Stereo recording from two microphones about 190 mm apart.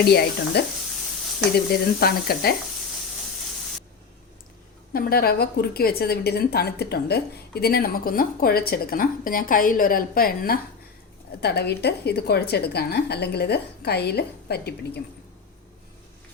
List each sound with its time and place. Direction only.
0.1 s a woman's voice: 55° left (ahead or behind)
4.9 s a woman's voice: 50° left (ahead or behind)